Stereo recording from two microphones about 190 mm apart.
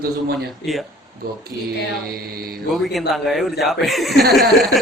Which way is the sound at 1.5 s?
15° right (ahead or behind).